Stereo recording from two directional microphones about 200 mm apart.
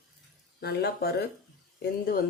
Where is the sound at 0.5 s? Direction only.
50° left (ahead or behind).